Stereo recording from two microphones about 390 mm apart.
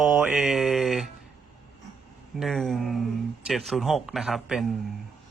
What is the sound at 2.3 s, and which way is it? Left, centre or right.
Speech, centre.